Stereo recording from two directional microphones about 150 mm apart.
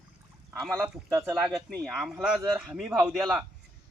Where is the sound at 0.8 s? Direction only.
15° right (ahead or behind).